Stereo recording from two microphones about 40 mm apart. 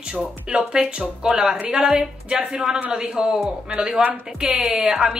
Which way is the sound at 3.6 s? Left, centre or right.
Right.